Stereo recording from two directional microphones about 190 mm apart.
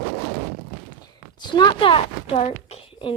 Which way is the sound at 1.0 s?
20° left (ahead or behind).